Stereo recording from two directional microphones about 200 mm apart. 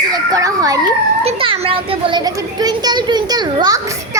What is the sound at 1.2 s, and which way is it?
A child's voice, 30° right (ahead or behind).